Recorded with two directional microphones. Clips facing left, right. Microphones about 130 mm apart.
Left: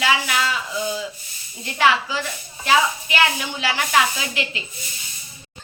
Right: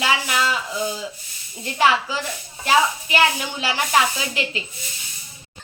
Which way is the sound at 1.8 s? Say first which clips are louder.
Even; 35° right (ahead or behind).